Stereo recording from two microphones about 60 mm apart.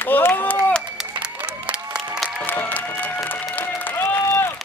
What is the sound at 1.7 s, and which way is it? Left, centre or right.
Applause, centre.